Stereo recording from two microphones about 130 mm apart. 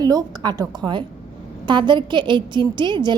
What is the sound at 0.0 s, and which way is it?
A woman's voice, 30° right (ahead or behind).